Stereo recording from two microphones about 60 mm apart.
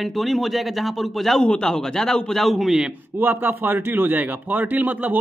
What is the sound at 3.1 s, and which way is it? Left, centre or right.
A man's voice, right.